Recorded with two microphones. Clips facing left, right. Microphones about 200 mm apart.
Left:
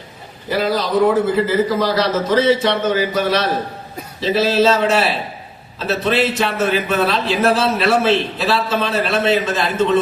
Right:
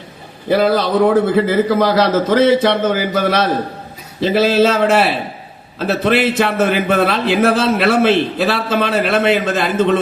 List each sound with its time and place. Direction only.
0.5 s a man's voice: 55° right (ahead or behind)